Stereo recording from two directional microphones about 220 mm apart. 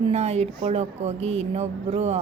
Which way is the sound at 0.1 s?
30° right (ahead or behind).